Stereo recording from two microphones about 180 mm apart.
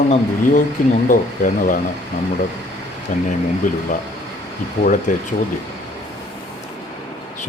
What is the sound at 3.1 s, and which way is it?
Speech, 45° left (ahead or behind).